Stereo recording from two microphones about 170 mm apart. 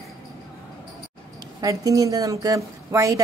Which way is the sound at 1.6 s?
20° right (ahead or behind).